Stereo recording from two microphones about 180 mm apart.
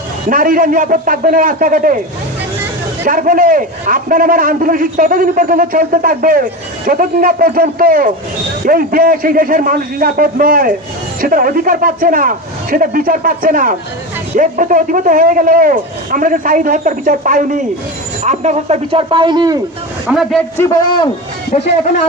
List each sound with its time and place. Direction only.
0.3 s a man's voice: 50° right (ahead or behind)
3.0 s a man's voice: 50° right (ahead or behind); by 19.5 s 25° right (ahead or behind)
20.1 s a man's voice: centre (ahead or behind)